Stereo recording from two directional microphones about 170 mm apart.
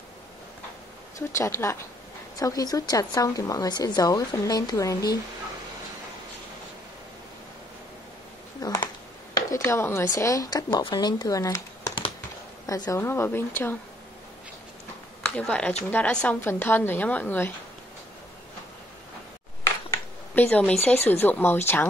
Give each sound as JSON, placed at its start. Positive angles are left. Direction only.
{"t": 1.3, "sound": "a woman's voice", "side_deg": 15}
{"t": 8.5, "sound": "a sound", "side_deg": 20}
{"t": 9.3, "sound": "speech", "side_deg": 15}
{"t": 15.3, "sound": "speech", "side_deg": 5}
{"t": 19.9, "sound": "a sound", "side_deg": 10}
{"t": 20.8, "sound": "speech", "side_deg": 10}